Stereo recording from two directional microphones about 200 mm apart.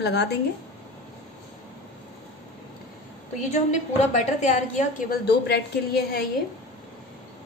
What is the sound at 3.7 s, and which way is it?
A woman's voice, 35° left (ahead or behind).